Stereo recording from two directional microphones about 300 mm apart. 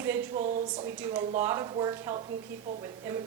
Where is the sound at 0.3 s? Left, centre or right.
Right.